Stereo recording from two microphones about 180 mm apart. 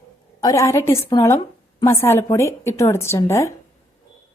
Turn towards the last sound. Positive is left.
turn(degrees=15)  # may be behind; listen again after turning